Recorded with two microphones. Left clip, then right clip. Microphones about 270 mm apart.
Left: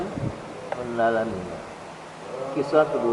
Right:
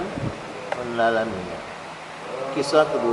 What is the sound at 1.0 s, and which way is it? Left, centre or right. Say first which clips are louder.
Speech: right 2 dB; centre.